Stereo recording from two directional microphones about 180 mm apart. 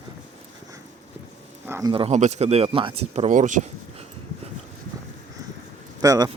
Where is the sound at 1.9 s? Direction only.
30° right (ahead or behind).